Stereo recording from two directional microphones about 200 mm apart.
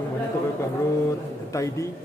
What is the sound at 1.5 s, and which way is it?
Speech, 15° left (ahead or behind).